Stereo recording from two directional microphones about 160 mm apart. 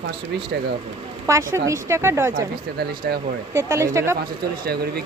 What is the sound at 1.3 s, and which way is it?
Speech, 20° right (ahead or behind).